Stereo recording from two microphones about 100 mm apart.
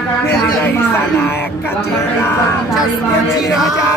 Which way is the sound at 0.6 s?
15° left (ahead or behind).